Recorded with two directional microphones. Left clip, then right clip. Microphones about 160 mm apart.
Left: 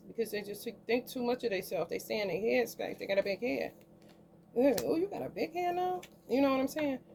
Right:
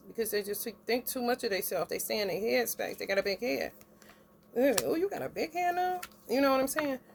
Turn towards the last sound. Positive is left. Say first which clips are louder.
# right 3 dB
turn(degrees=-50)  # may be behind; listen again after turning